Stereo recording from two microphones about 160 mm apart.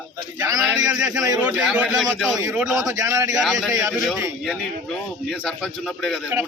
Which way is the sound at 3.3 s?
Centre (ahead or behind).